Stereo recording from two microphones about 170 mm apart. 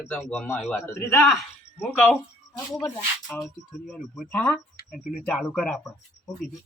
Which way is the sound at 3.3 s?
10° left (ahead or behind).